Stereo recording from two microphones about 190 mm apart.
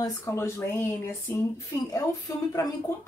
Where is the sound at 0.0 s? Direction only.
15° left (ahead or behind).